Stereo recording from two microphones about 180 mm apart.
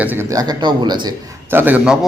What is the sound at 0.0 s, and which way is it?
Speech, 10° right (ahead or behind).